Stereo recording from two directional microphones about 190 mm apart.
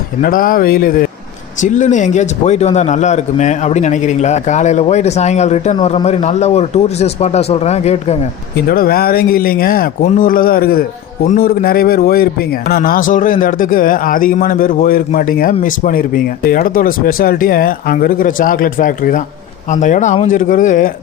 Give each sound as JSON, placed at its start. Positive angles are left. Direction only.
{"t": 0.2, "sound": "speech", "side_deg": 45}
{"t": 8.5, "sound": "speech", "side_deg": 50}